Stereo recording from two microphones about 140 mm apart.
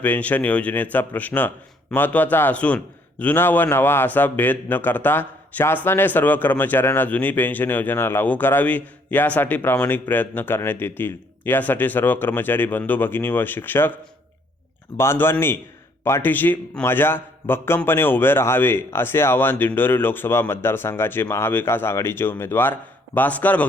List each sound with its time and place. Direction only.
0.0 s a man's voice: 10° left (ahead or behind)
14.9 s a man's voice: 15° left (ahead or behind)